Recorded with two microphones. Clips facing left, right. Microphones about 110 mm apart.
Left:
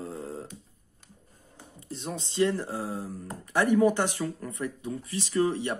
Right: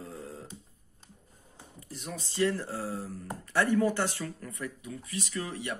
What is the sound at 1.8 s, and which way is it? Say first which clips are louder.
Speech: left 5 dB; 25° left (ahead or behind).